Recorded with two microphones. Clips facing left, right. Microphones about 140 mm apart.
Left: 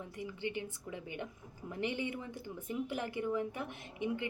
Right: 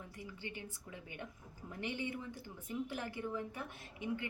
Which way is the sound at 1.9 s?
55° left (ahead or behind).